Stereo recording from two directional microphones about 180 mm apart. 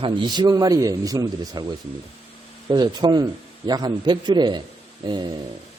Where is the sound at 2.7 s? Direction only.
25° right (ahead or behind).